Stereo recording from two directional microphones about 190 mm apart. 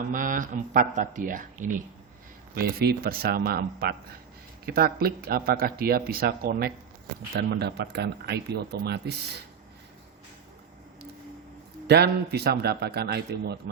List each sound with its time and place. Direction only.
0.1 s speech: 45° right (ahead or behind)
2.6 s speech: 55° right (ahead or behind)
11.9 s speech: 60° right (ahead or behind)